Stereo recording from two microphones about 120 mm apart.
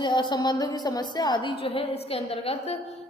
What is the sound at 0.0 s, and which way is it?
A woman's voice, 40° left (ahead or behind).